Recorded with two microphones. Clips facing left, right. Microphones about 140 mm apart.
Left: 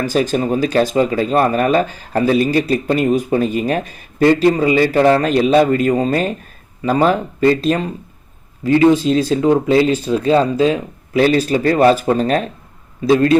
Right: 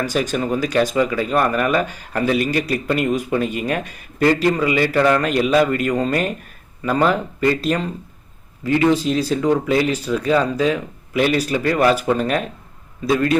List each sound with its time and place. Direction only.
0.0 s speech: 30° left (ahead or behind)